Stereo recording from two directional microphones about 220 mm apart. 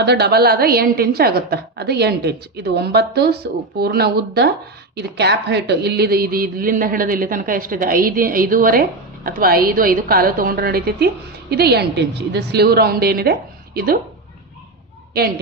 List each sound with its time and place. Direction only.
0.0 s a woman's voice: 50° right (ahead or behind)